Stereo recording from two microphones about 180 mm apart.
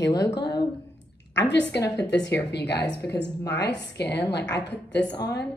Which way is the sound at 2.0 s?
75° left (ahead or behind).